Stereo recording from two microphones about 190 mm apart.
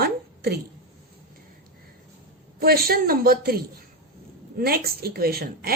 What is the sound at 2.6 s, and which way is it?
A woman's voice, 50° right (ahead or behind).